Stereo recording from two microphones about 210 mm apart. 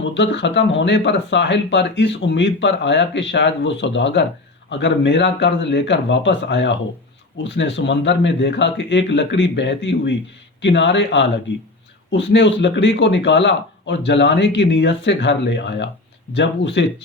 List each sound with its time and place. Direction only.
0.1 s speech: 60° left (ahead or behind)